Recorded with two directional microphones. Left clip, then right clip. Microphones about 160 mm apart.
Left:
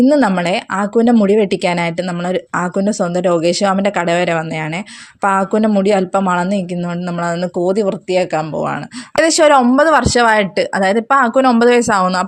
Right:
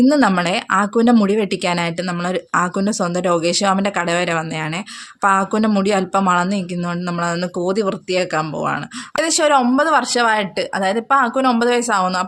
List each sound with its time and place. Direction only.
0.0 s speech: 10° left (ahead or behind)
9.1 s speech: 40° left (ahead or behind)